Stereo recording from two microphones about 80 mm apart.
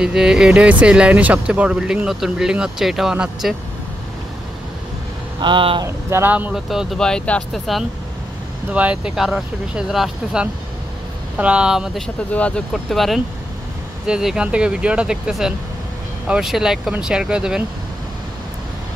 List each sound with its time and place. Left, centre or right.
0.0 s speech: centre
5.4 s speech: right
6.0 s speech: right
6.5 s speech: centre
7.0 s speech: centre
7.5 s speech: centre
8.7 s speech: centre
12.3 s speech: centre
12.9 s speech: centre
14.0 s speech: centre